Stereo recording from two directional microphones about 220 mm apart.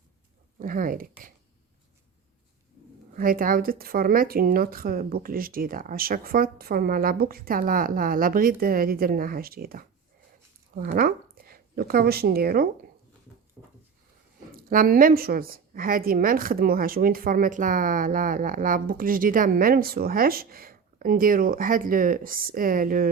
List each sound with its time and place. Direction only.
0.6 s a woman's voice: 40° right (ahead or behind)
3.2 s a woman's voice: 40° right (ahead or behind)
14.5 s a woman's voice: 40° right (ahead or behind)